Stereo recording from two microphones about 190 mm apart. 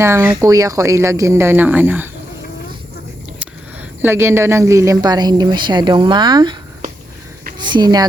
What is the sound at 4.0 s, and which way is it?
A woman's voice, 10° right (ahead or behind).